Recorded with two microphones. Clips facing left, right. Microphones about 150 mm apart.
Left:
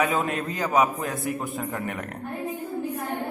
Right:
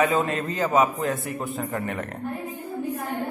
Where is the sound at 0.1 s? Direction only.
10° left (ahead or behind).